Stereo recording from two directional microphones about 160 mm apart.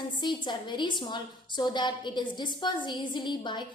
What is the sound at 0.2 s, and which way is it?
A woman's voice, 30° left (ahead or behind).